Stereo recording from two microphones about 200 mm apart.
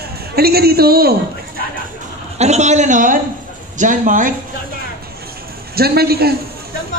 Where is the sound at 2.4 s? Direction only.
35° right (ahead or behind).